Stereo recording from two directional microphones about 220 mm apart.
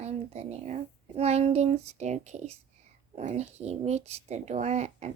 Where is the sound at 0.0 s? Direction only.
30° right (ahead or behind).